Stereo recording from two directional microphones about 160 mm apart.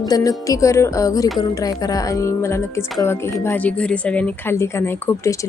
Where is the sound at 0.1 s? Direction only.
20° left (ahead or behind).